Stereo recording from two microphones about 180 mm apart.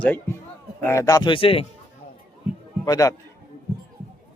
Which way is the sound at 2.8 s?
20° left (ahead or behind).